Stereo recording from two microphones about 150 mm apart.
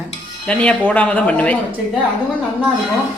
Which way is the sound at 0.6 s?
10° left (ahead or behind).